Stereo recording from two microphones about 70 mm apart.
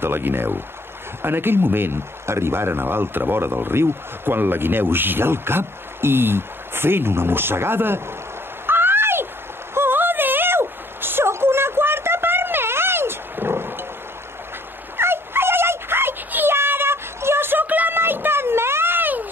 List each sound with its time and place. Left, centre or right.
0.0 s speech: right
8.6 s a sound: right
15.0 s dog: right